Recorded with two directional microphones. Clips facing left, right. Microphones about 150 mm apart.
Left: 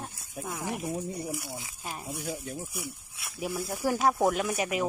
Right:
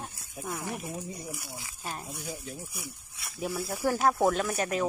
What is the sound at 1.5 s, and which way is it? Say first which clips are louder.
Speech: left 2 dB; 20° left (ahead or behind).